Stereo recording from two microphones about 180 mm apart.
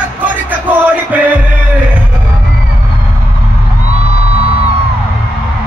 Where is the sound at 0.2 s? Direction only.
10° right (ahead or behind).